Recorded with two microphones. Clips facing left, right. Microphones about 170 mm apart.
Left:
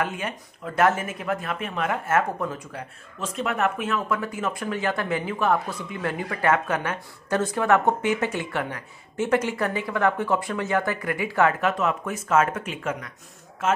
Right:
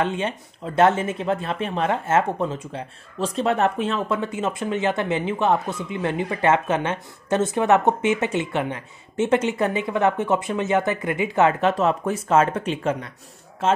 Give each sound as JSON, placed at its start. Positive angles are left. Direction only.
{"t": 0.0, "sound": "speech", "side_deg": -25}